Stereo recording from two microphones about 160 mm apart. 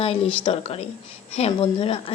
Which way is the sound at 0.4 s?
35° left (ahead or behind).